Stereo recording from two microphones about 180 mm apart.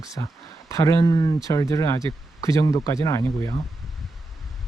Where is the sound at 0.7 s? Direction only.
20° left (ahead or behind).